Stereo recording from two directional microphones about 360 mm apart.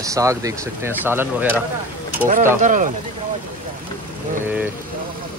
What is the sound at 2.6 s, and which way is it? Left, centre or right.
Speech, right.